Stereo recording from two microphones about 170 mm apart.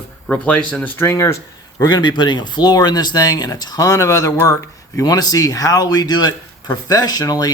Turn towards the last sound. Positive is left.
turn(degrees=20)  # may be behind; listen again after turning